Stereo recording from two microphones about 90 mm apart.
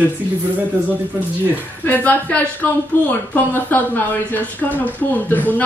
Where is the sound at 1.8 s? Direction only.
20° left (ahead or behind).